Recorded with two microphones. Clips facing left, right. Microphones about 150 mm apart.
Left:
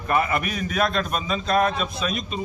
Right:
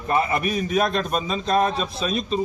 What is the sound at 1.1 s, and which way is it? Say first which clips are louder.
A man's voice: right 1 dB; 35° right (ahead or behind).